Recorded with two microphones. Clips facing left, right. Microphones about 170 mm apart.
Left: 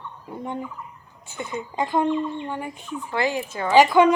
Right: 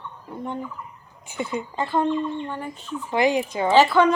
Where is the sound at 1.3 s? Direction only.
15° right (ahead or behind).